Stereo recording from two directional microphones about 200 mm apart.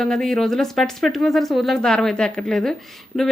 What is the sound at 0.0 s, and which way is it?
A woman's voice, centre (ahead or behind).